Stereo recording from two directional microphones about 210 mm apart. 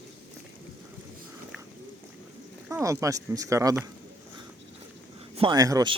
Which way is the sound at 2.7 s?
15° right (ahead or behind).